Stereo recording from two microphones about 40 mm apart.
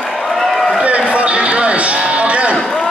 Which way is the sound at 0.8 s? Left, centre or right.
Right.